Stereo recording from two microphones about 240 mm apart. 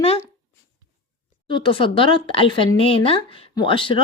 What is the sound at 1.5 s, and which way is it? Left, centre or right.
Speech, left.